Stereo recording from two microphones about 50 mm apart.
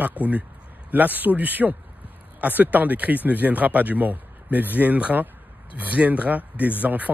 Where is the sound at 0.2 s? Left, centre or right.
Right.